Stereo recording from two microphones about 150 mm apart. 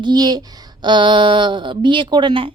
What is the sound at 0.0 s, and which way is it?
Speech, 30° right (ahead or behind).